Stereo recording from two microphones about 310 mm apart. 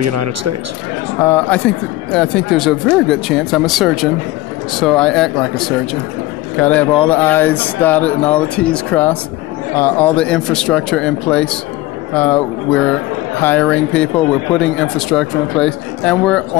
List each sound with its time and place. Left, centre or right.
0.0 s speech: right
1.2 s speech: centre